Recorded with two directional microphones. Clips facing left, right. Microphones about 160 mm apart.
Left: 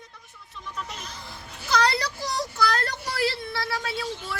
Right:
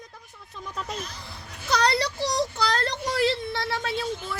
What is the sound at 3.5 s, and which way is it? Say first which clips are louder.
Speech: right 1 dB; 25° right (ahead or behind).